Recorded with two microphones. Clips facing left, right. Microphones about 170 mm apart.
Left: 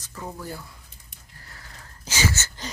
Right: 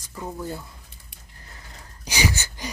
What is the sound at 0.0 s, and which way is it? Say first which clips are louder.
Speech: right 3 dB; 10° right (ahead or behind).